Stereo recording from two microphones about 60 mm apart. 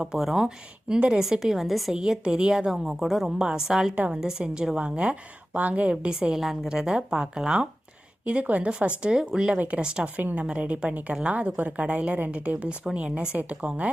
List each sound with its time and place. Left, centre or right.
0.0 s a woman's voice: centre
0.9 s a woman's voice: right
1.2 s a woman's voice: centre
8.2 s a woman's voice: right
9.6 s a woman's voice: right
10.2 s a woman's voice: right